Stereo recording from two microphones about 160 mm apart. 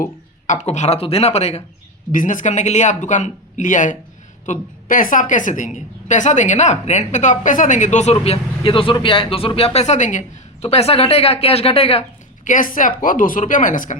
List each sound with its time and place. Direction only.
0.0 s a woman's voice: 50° left (ahead or behind)
12.5 s speech: 55° left (ahead or behind)